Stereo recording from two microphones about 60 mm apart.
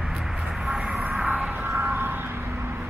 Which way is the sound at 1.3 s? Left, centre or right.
Right.